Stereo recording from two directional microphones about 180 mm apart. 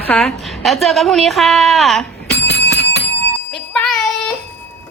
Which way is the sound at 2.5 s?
65° left (ahead or behind).